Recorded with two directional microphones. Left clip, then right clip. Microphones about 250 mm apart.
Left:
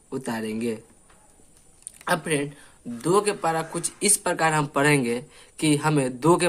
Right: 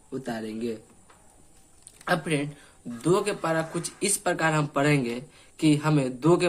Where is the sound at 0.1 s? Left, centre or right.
Left.